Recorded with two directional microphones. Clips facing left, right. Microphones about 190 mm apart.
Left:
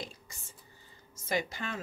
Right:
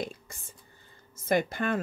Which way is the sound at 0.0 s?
55° right (ahead or behind).